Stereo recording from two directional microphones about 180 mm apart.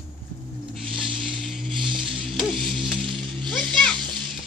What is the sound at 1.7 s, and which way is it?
Music, 25° right (ahead or behind).